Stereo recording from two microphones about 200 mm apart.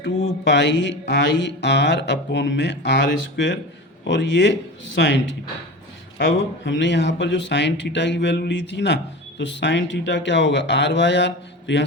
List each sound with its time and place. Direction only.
0.4 s speech: 60° left (ahead or behind)